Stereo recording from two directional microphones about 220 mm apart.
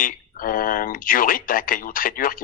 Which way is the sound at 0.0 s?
40° left (ahead or behind).